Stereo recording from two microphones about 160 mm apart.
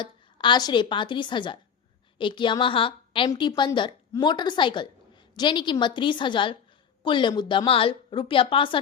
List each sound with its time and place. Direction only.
0.0 s a woman's voice: 30° left (ahead or behind)